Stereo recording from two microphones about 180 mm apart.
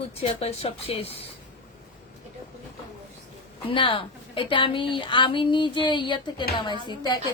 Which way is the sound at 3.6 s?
30° left (ahead or behind).